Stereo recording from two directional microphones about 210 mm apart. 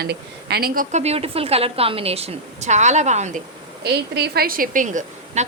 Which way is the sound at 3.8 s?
50° right (ahead or behind).